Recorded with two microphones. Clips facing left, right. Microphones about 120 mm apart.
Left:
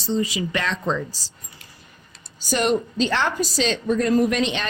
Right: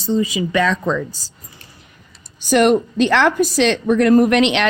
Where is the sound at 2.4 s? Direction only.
60° right (ahead or behind).